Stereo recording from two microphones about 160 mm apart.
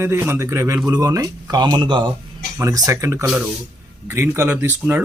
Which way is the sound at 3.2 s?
5° right (ahead or behind).